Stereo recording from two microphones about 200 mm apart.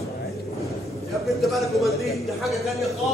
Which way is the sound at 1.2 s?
Centre (ahead or behind).